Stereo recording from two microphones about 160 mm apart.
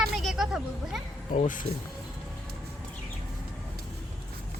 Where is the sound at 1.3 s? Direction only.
55° left (ahead or behind).